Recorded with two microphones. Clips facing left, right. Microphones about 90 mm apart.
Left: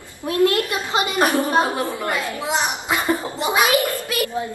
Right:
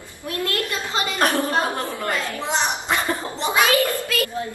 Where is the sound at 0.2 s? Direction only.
20° left (ahead or behind); by 3.0 s 5° left (ahead or behind).